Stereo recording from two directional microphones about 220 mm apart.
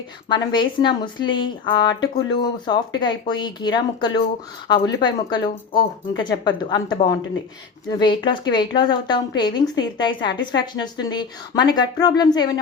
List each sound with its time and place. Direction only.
0.3 s a woman's voice: 20° left (ahead or behind)